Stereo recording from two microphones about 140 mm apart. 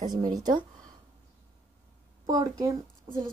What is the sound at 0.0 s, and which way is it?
Speech, 30° right (ahead or behind).